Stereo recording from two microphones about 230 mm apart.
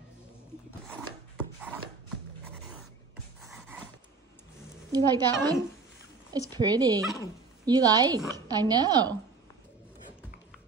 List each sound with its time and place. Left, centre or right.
4.9 s a woman's voice: centre